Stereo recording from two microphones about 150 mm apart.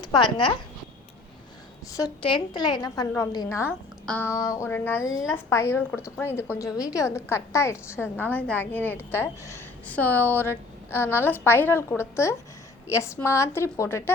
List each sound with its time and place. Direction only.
0.0 s a woman's voice: 30° left (ahead or behind)
2.0 s a woman's voice: 30° left (ahead or behind)
4.0 s a sound: 5° left (ahead or behind)
4.3 s a woman's voice: 20° left (ahead or behind)